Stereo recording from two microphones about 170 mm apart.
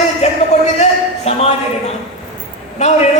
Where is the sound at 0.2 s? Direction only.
40° left (ahead or behind).